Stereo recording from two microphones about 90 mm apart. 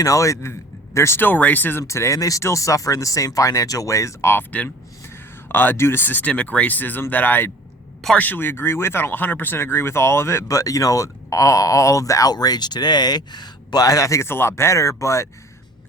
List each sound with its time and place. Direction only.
0.0 s speech: 35° left (ahead or behind); by 1.8 s 20° left (ahead or behind)
1.8 s speech: 35° left (ahead or behind)